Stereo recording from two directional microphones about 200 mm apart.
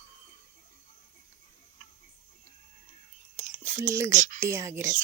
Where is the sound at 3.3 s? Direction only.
40° right (ahead or behind).